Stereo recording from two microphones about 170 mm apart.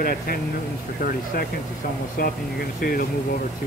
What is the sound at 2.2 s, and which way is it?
Speech, 60° left (ahead or behind).